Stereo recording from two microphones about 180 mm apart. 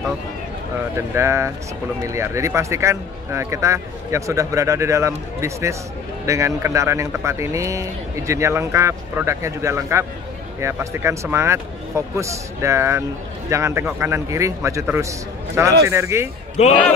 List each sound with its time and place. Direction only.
1.1 s a man's voice: 15° right (ahead or behind)
16.6 s speech: 40° left (ahead or behind)